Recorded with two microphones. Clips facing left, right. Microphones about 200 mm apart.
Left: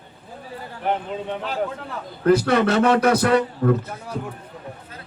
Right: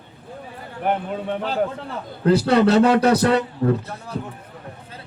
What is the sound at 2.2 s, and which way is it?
A man's voice, 30° right (ahead or behind).